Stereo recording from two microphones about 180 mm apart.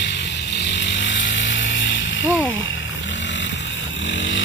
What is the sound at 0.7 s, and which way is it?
Chainsaw, 85° left.